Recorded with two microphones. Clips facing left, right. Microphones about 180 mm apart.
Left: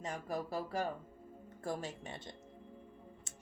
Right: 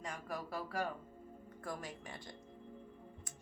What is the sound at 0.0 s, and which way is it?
A woman's voice, 25° left (ahead or behind).